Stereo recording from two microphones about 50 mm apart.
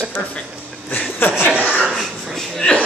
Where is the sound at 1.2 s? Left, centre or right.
Left.